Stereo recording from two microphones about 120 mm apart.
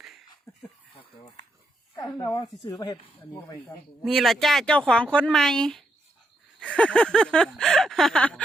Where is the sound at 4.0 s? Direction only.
Centre (ahead or behind).